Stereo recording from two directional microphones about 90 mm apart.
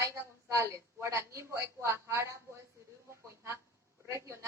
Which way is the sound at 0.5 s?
35° right (ahead or behind).